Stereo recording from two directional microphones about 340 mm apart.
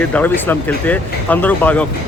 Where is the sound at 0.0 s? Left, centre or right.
Centre.